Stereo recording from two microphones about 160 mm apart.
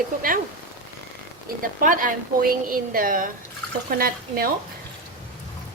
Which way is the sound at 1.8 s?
60° right (ahead or behind).